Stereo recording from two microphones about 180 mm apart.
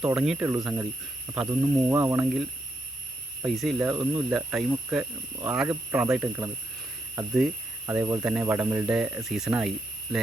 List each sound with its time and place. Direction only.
0.0 s speech: 5° right (ahead or behind)
3.9 s speech: 15° right (ahead or behind)
4.3 s speech: centre (ahead or behind)